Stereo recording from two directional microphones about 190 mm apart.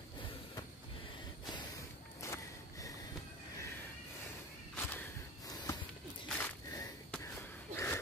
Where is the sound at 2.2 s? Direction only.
15° left (ahead or behind).